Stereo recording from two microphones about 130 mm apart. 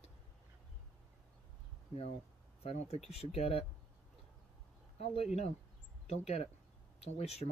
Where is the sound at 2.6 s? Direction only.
50° left (ahead or behind).